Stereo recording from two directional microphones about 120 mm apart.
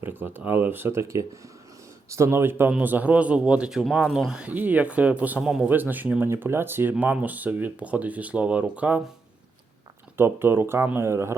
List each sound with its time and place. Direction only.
0.0 s speech: 15° right (ahead or behind)
10.2 s speech: 20° right (ahead or behind)